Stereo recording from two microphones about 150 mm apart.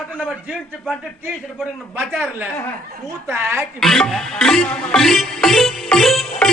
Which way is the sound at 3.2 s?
15° right (ahead or behind).